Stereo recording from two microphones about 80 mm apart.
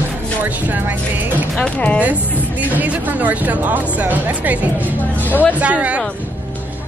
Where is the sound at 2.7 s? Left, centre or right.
Centre.